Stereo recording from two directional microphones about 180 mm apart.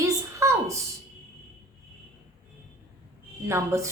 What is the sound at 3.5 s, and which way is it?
Speech, 15° right (ahead or behind).